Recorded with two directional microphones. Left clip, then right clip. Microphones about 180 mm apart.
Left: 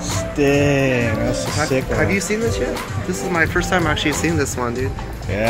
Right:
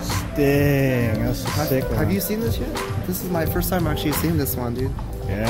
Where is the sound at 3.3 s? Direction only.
45° right (ahead or behind).